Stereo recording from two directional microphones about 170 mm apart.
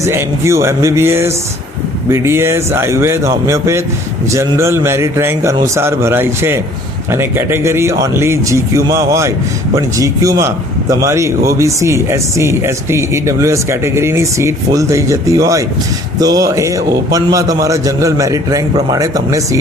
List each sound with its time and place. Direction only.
0.0 s a man's voice: 15° right (ahead or behind)